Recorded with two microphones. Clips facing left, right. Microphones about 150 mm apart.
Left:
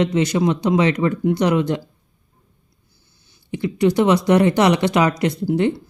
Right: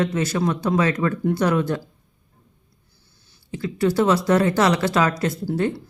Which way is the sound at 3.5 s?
20° left (ahead or behind).